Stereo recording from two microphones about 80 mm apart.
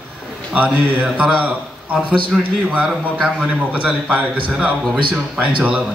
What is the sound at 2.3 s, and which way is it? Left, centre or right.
Speech, centre.